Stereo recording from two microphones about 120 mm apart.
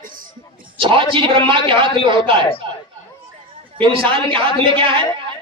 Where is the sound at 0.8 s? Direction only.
45° right (ahead or behind).